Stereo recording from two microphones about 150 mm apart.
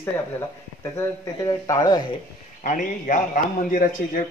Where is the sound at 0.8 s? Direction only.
20° left (ahead or behind).